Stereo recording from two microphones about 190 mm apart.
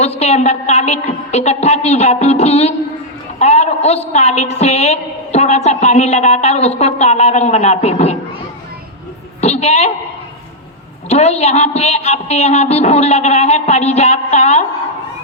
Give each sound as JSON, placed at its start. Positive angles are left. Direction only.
{"t": 0.2, "sound": "a man's voice", "side_deg": 35}
{"t": 9.4, "sound": "a man's voice", "side_deg": 35}
{"t": 11.1, "sound": "a man's voice", "side_deg": 35}